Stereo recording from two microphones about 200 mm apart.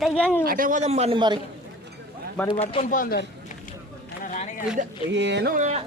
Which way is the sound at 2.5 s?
30° left (ahead or behind).